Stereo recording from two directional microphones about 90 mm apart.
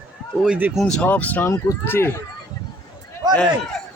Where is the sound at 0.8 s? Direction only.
10° left (ahead or behind).